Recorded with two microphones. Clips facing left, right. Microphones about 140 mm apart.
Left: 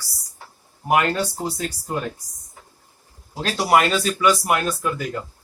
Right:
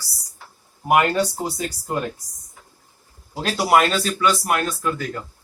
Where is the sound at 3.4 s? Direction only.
Centre (ahead or behind).